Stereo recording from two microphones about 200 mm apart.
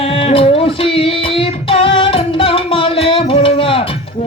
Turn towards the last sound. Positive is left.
turn(degrees=25)  # may be behind; listen again after turning